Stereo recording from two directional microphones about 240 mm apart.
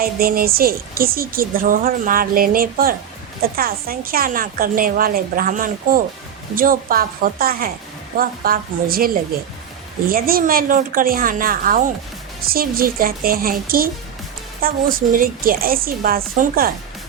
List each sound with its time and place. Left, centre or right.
0.0 s a woman's voice: right